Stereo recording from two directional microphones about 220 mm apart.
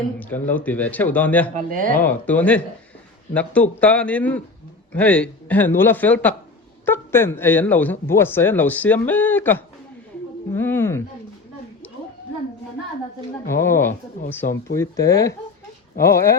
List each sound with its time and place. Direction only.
0.2 s speech: 5° left (ahead or behind)
1.5 s speech: 40° right (ahead or behind)
2.0 s speech: 5° left (ahead or behind)
10.5 s a sound: 10° left (ahead or behind)
13.5 s speech: 10° left (ahead or behind)
14.4 s speech: 40° left (ahead or behind)
14.8 s speech: 15° left (ahead or behind)